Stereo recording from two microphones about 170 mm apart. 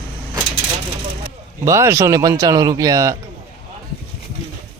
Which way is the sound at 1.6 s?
15° right (ahead or behind).